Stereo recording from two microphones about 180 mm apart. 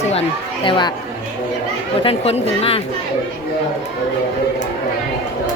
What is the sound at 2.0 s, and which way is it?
Speech, 35° left (ahead or behind).